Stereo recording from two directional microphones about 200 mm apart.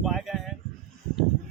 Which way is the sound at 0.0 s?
Centre (ahead or behind).